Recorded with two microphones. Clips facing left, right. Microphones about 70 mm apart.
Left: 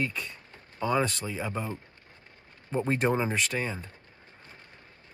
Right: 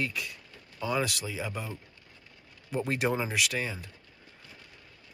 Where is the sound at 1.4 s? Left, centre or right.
Left.